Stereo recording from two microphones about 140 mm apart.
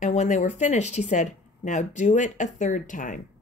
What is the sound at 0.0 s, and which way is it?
A woman's voice, 55° left (ahead or behind).